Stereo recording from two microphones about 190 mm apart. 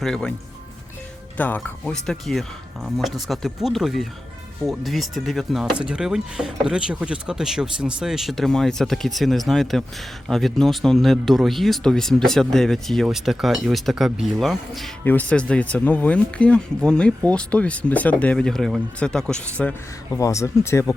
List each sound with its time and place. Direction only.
0.0 s speech: 5° left (ahead or behind)
1.4 s speech: 10° left (ahead or behind)
20.1 s speech: 15° left (ahead or behind)